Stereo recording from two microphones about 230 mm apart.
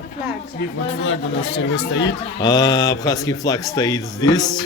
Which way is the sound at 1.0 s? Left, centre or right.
Left.